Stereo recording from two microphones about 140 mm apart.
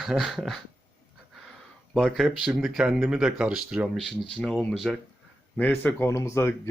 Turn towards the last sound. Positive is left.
turn(degrees=20)  # may be behind; listen again after turning